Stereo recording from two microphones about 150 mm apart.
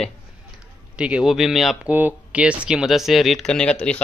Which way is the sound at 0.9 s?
5° right (ahead or behind).